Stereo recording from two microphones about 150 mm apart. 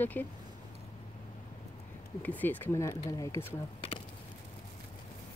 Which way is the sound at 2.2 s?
10° left (ahead or behind).